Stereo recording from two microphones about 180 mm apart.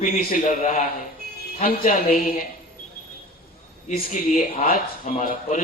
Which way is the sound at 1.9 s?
45° left (ahead or behind).